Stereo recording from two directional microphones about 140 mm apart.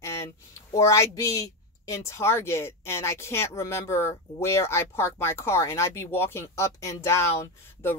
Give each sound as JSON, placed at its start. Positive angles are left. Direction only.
{"t": 0.7, "sound": "speech", "side_deg": 20}